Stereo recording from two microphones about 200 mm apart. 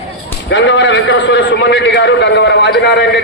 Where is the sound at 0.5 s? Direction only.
65° left (ahead or behind).